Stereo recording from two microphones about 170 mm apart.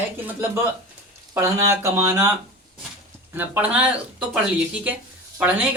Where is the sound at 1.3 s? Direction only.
15° right (ahead or behind).